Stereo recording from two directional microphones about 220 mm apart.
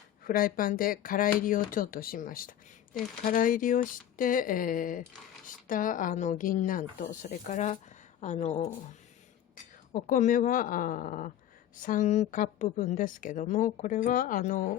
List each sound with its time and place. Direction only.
0.3 s a woman's voice: 40° left (ahead or behind)
9.9 s a woman's voice: 35° left (ahead or behind)